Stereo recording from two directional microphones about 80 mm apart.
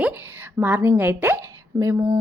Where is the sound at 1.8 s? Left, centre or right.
Right.